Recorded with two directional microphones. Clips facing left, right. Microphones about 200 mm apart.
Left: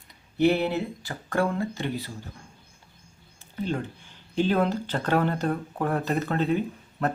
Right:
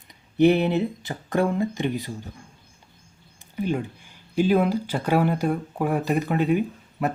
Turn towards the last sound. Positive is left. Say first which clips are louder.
# right 2 dB
turn(degrees=-10)  # may be behind; listen again after turning